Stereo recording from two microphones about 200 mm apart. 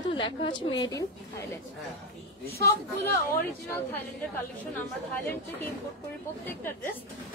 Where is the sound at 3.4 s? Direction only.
10° left (ahead or behind).